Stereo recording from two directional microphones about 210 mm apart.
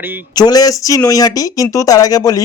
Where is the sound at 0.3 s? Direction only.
20° left (ahead or behind).